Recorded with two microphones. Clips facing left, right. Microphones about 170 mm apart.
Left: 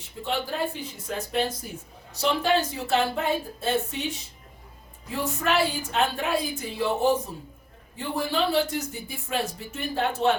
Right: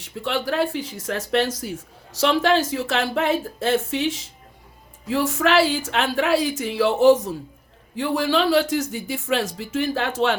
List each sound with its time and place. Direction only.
0.0 s speech: 85° right